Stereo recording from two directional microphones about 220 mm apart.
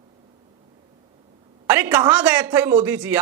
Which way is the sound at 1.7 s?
10° right (ahead or behind).